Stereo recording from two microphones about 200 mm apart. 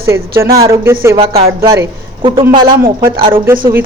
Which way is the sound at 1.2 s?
30° right (ahead or behind).